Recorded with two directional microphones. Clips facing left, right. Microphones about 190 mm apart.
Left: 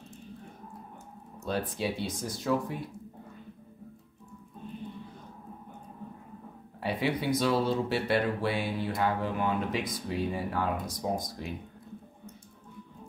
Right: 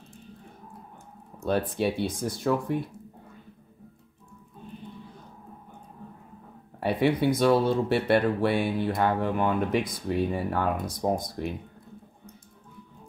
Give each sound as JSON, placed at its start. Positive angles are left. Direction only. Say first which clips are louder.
{"t": 1.4, "sound": "mantra", "louder": "right 6 dB", "side_deg": -60}
{"t": 6.8, "sound": "speech", "louder": "right 6 dB", "side_deg": -60}
{"t": 7.3, "sound": "mantra", "louder": "right 5 dB", "side_deg": -55}